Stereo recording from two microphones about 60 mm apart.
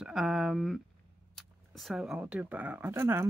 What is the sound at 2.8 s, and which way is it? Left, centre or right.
Speech, right.